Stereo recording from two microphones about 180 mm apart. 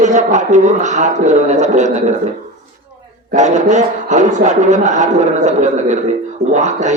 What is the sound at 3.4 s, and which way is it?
A man's voice, 40° right (ahead or behind).